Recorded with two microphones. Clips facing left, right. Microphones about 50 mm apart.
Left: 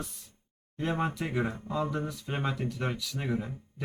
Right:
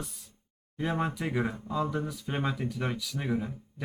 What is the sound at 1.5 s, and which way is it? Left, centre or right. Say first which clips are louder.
Speech: right 1 dB; left.